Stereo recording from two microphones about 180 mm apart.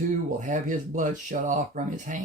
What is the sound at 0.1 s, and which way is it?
Speech, 45° right (ahead or behind).